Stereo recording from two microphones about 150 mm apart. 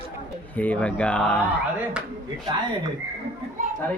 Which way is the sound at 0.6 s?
10° left (ahead or behind).